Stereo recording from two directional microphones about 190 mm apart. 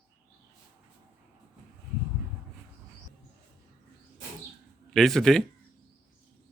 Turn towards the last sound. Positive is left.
turn(degrees=0)  # may be behind; listen again after turning